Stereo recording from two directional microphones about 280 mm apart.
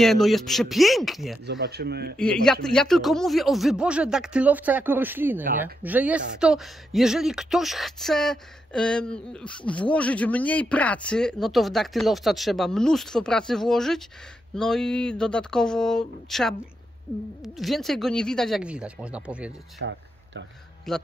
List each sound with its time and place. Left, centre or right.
0.0 s speech: centre
1.4 s speech: right
2.1 s speech: centre
19.8 s a sound: right
20.9 s speech: centre